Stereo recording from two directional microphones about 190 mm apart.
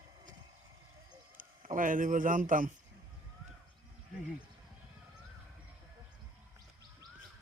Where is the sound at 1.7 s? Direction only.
45° right (ahead or behind).